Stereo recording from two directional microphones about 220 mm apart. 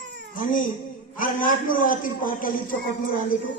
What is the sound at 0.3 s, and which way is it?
Speech, 35° left (ahead or behind).